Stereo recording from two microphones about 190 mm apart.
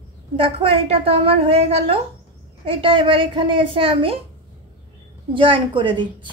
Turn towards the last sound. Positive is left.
turn(degrees=-25)  # may be behind; listen again after turning